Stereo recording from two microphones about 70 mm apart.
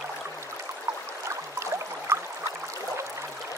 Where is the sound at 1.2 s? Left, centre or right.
Right.